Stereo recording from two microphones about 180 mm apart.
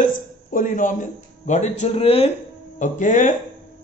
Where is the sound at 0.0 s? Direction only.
50° left (ahead or behind).